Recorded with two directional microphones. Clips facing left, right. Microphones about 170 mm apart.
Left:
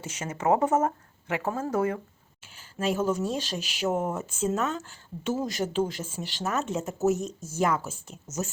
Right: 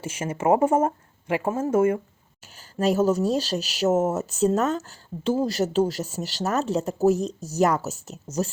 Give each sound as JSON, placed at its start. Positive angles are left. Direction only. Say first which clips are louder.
{"t": 0.3, "sound": "speech", "louder": "right 4 dB", "side_deg": -25}
{"t": 2.6, "sound": "speech", "louder": "right 6 dB", "side_deg": -40}